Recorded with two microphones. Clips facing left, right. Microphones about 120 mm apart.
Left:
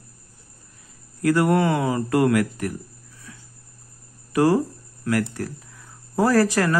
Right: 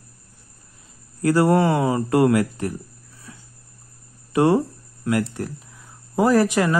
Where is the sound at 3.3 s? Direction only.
25° right (ahead or behind).